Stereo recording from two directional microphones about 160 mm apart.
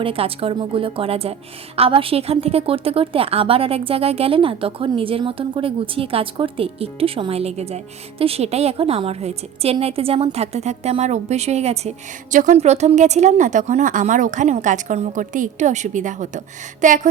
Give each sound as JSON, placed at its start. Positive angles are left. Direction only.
{"t": 0.0, "sound": "a woman's voice", "side_deg": -35}